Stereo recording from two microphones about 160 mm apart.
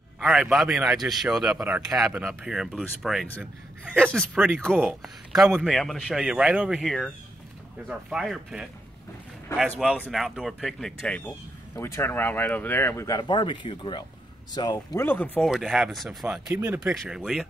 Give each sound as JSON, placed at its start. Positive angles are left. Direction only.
{"t": 0.2, "sound": "a man's voice", "side_deg": -5}
{"t": 4.4, "sound": "a man's voice", "side_deg": -5}
{"t": 9.9, "sound": "speech", "side_deg": 10}
{"t": 10.2, "sound": "speech", "side_deg": 0}
{"t": 15.0, "sound": "speech", "side_deg": 10}
{"t": 15.5, "sound": "a man's voice", "side_deg": 0}
{"t": 16.4, "sound": "speech", "side_deg": -15}
{"t": 16.9, "sound": "a man's voice", "side_deg": -5}